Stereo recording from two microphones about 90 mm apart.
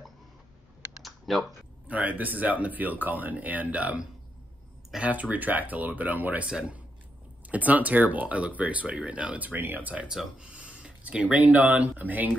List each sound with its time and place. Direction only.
1.0 s typing: centre (ahead or behind)
1.9 s speech: 15° right (ahead or behind)